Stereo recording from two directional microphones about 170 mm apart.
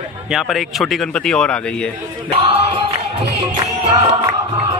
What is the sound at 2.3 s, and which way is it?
Music, 30° right (ahead or behind).